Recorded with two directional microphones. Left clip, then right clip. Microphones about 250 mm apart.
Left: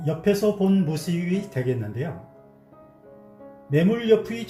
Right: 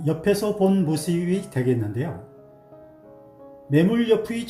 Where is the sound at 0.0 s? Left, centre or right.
Right.